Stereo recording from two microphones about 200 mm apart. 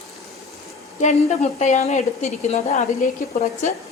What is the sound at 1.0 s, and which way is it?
A woman's voice, 35° left (ahead or behind).